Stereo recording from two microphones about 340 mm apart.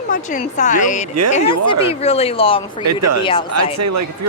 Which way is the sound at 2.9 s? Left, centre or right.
Right.